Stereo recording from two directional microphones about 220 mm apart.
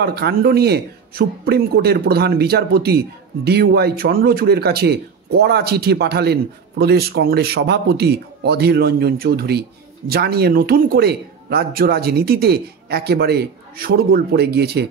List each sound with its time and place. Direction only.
0.0 s a man's voice: 45° right (ahead or behind)